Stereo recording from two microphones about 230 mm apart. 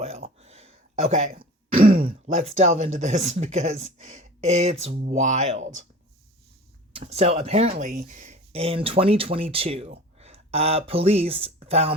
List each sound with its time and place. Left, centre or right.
0.0 s throat clearing: right
2.2 s speech: right
6.9 s speech: right